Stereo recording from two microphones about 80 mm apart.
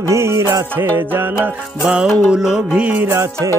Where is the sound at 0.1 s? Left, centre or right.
Right.